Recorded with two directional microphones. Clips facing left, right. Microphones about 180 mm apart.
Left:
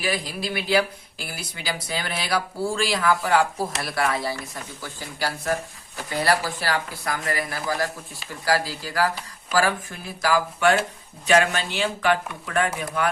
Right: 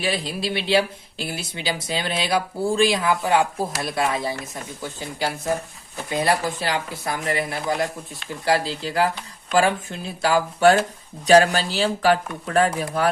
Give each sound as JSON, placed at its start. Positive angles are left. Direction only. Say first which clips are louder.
{"t": 0.0, "sound": "speech", "louder": "right 2 dB", "side_deg": -25}